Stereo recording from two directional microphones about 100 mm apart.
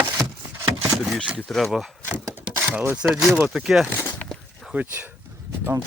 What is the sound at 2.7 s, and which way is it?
Speech, 15° right (ahead or behind).